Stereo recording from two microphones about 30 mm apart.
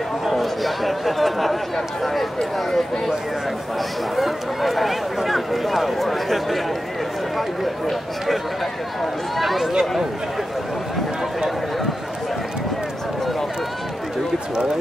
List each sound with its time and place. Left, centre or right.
0.3 s a sound: centre
4.2 s speech: centre
9.4 s speech: centre
9.7 s speech: centre